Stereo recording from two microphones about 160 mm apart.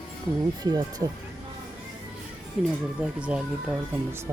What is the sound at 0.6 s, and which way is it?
Speech, 25° right (ahead or behind).